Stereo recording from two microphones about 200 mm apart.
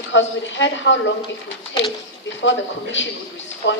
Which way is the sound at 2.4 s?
65° left (ahead or behind).